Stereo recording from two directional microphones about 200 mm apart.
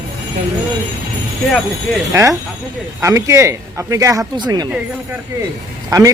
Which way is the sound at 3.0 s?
15° right (ahead or behind).